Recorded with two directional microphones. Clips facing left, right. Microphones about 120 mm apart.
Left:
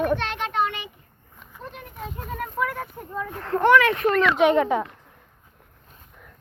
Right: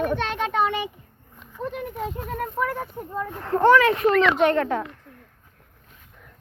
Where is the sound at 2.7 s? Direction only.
10° right (ahead or behind).